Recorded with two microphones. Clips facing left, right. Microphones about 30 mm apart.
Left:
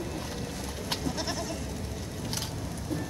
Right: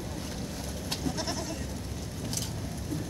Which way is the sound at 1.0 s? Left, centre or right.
Centre.